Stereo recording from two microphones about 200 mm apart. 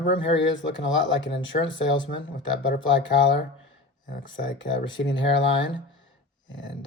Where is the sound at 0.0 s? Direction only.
70° left (ahead or behind).